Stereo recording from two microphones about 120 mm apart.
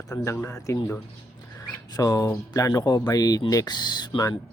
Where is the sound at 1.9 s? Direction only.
30° left (ahead or behind).